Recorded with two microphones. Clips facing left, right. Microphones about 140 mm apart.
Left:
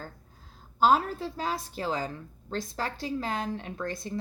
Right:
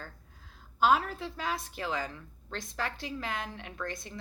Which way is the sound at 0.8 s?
35° left (ahead or behind).